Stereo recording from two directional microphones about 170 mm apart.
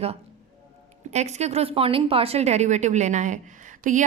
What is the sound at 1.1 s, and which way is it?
A woman's voice, 40° right (ahead or behind).